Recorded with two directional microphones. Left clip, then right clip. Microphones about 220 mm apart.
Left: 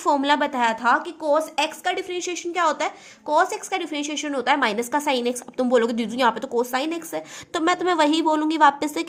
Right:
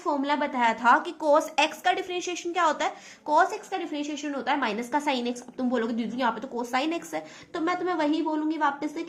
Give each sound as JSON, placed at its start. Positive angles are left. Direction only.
{"t": 0.0, "sound": "a woman's voice", "side_deg": 35}
{"t": 7.5, "sound": "a woman's voice", "side_deg": 35}